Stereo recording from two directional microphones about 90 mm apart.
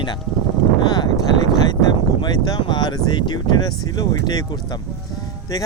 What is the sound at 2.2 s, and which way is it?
Speech, 50° left (ahead or behind).